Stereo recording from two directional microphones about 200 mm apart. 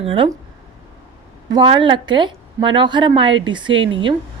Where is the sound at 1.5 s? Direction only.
25° right (ahead or behind).